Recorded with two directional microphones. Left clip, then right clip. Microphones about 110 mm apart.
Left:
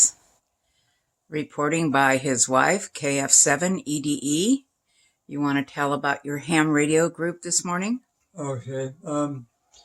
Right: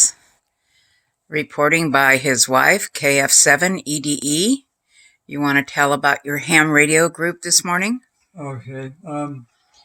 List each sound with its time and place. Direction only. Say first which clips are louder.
0.0 s whispering: right 4 dB; 20° right (ahead or behind)
1.3 s speech: right 9 dB; 20° right (ahead or behind)
8.4 s speech: left 2 dB; 35° left (ahead or behind)